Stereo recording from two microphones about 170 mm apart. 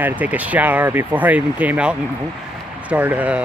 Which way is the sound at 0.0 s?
10° right (ahead or behind).